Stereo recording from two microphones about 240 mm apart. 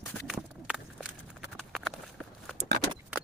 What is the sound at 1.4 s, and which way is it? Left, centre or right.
Clip-clop, centre.